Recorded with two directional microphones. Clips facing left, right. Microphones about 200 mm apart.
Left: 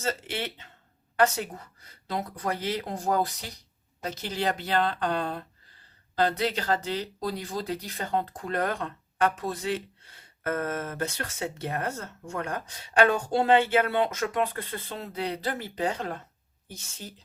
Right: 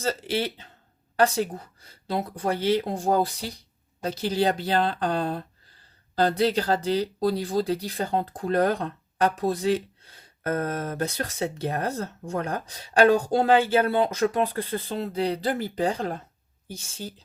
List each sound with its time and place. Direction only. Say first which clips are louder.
0.0 s speech: right 5 dB; 35° right (ahead or behind)